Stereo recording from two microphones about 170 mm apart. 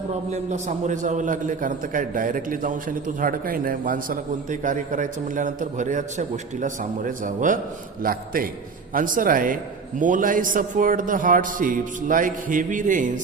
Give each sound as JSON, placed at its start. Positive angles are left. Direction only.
{"t": 0.1, "sound": "a man's voice", "side_deg": -45}